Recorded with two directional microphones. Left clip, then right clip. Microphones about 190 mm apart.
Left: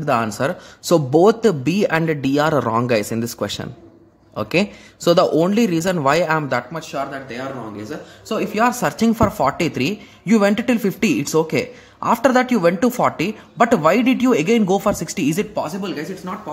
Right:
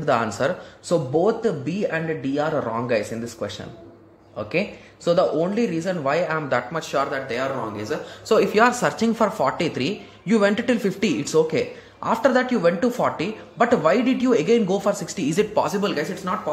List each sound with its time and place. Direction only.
0.0 s speech: 30° left (ahead or behind)
0.4 s a man's voice: 40° left (ahead or behind)
6.7 s speech: 20° left (ahead or behind)
15.3 s speech: 15° left (ahead or behind)